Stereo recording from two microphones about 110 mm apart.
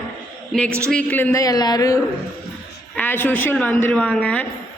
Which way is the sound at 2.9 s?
15° left (ahead or behind).